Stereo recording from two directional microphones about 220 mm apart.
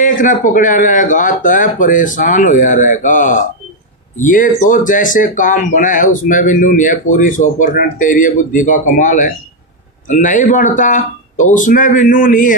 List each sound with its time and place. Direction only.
0.0 s speech: 35° left (ahead or behind)